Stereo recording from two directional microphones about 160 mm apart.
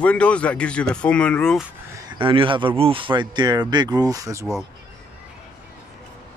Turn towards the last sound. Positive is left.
turn(degrees=-20)  # may be behind; listen again after turning